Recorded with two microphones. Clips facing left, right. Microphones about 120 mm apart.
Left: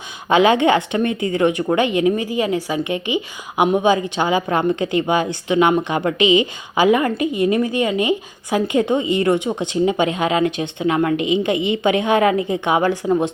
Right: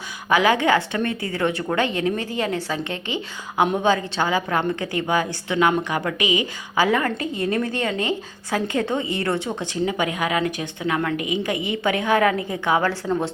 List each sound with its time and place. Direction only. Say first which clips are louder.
0.3 s a woman's voice: left 4 dB; 25° left (ahead or behind)